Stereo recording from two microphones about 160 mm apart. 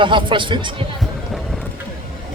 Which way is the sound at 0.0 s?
30° right (ahead or behind).